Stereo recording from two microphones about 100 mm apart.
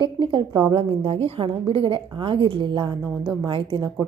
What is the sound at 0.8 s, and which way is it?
A woman's voice, 70° right (ahead or behind).